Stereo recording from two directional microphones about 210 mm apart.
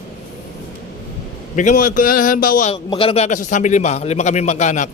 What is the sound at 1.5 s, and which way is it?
A man's voice, 40° left (ahead or behind).